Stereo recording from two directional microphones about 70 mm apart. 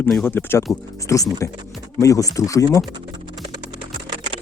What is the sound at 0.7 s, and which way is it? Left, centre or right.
Speech, left.